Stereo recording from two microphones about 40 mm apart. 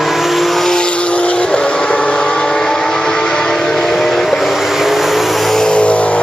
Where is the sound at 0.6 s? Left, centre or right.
Left; by 5.6 s centre.